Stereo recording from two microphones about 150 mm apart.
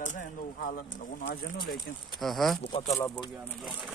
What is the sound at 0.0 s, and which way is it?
Speech, 60° left (ahead or behind).